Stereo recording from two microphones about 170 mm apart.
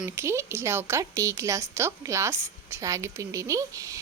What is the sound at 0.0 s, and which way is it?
A woman's voice, 15° right (ahead or behind).